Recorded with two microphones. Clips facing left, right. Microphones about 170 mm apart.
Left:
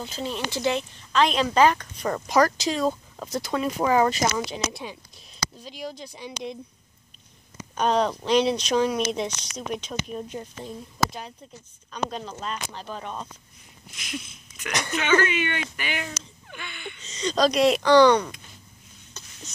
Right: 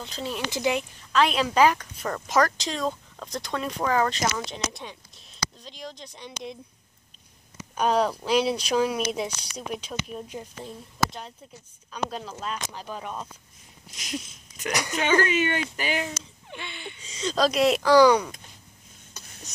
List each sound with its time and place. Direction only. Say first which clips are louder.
0.0 s speech: left 2 dB; centre (ahead or behind)
0.5 s speech: even; 15° right (ahead or behind)
2.0 s speech: left 2 dB; 5° left (ahead or behind)
7.7 s speech: even; 5° right (ahead or behind)
13.8 s wheeze: right 1 dB; 40° right (ahead or behind)
14.7 s speech: even; 15° right (ahead or behind)
15.0 s speech: even; 35° right (ahead or behind)
17.0 s speech: left 2 dB; 5° right (ahead or behind)